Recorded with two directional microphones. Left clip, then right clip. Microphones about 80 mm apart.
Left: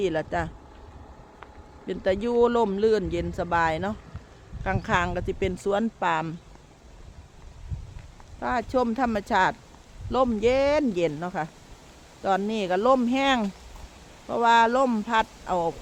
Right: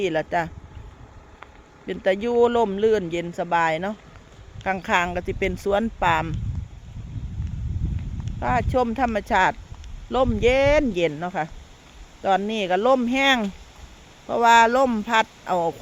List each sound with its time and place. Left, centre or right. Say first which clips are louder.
0.0 s speech: right 3 dB; centre
1.9 s speech: right 3 dB; centre
8.4 s speech: right 3 dB; centre
8.9 s speech: right 3 dB; centre; by 13.5 s right
14.3 s speech: right 4 dB; right